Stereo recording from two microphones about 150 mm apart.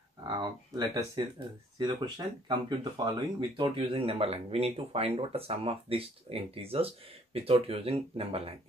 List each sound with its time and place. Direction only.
0.2 s speech: 30° right (ahead or behind)